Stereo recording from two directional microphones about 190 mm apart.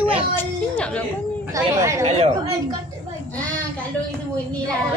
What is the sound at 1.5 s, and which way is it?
Speech, 15° right (ahead or behind).